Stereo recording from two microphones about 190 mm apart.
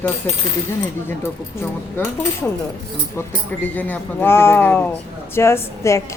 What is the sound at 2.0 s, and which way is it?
Speech, 10° left (ahead or behind).